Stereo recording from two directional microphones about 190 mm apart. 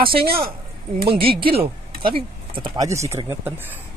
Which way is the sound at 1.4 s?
30° right (ahead or behind).